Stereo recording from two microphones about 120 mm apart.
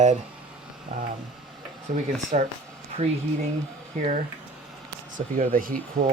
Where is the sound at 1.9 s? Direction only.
90° right.